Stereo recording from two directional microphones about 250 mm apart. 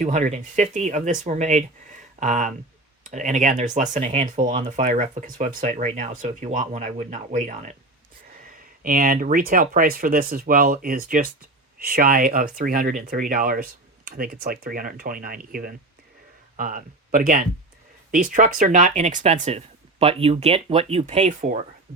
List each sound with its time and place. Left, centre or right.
0.0 s speech: right
8.8 s speech: right